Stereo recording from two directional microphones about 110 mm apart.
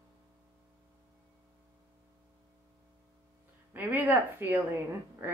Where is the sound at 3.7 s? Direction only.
20° right (ahead or behind).